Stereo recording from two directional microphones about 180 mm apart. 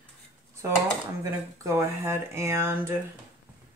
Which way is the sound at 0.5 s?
15° right (ahead or behind).